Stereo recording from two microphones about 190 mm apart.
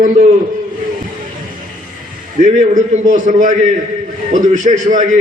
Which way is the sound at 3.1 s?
40° right (ahead or behind).